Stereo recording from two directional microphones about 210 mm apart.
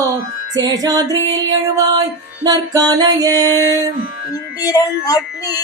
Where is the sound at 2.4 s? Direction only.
15° right (ahead or behind).